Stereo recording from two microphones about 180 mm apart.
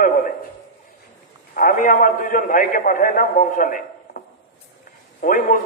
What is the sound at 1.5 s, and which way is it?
A man's voice, 50° left (ahead or behind).